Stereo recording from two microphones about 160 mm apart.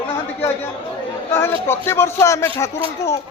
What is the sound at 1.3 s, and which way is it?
A man's voice, 15° left (ahead or behind).